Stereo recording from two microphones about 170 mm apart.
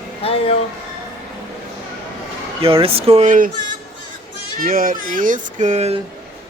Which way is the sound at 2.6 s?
35° right (ahead or behind).